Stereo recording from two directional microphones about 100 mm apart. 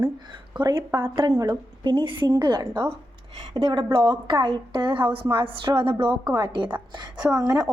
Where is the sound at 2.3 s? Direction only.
45° right (ahead or behind).